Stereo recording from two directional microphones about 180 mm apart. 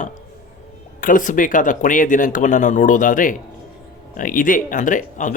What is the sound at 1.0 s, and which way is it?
Speech, 45° left (ahead or behind).